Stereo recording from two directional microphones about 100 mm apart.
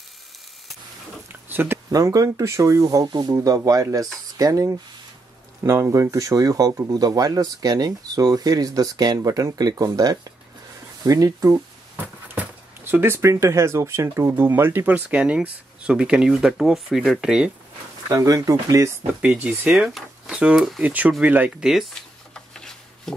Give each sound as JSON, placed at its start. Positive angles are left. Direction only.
{"t": 1.3, "sound": "a sound", "side_deg": -20}
{"t": 1.9, "sound": "speech", "side_deg": -35}
{"t": 12.8, "sound": "speech", "side_deg": -20}
{"t": 18.0, "sound": "speech", "side_deg": -35}
{"t": 19.2, "sound": "speech", "side_deg": -15}
{"t": 20.8, "sound": "speech", "side_deg": -15}
{"t": 22.3, "sound": "a sound", "side_deg": 5}